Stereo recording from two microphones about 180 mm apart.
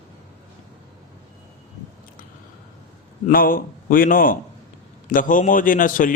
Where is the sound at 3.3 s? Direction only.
50° left (ahead or behind).